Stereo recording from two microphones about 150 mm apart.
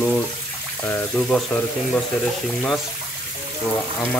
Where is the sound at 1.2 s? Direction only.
5° left (ahead or behind).